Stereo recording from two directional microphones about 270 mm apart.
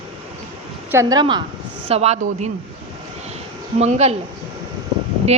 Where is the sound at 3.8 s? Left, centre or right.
Right.